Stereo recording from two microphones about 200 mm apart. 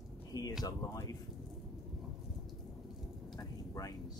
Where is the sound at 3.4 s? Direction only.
15° left (ahead or behind).